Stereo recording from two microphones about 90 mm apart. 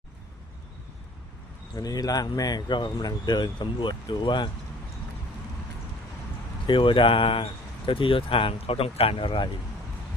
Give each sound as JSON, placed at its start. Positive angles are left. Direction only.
{"t": 1.7, "sound": "speech", "side_deg": 45}
{"t": 6.7, "sound": "speech", "side_deg": 65}